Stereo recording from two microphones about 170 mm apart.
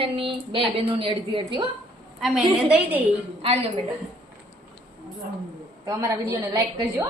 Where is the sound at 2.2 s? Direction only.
5° right (ahead or behind).